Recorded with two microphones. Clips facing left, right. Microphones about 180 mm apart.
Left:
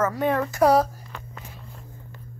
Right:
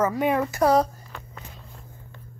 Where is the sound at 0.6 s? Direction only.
5° left (ahead or behind).